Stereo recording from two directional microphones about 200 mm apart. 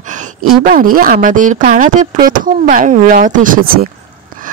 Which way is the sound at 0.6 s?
45° right (ahead or behind).